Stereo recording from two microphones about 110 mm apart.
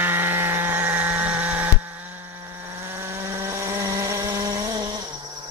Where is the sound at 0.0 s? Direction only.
15° right (ahead or behind).